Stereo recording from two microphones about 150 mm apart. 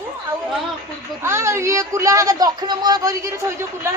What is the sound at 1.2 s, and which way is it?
Speech, 20° right (ahead or behind).